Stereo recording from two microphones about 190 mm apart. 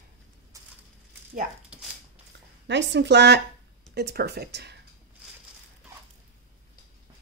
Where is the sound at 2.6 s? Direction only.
70° right (ahead or behind).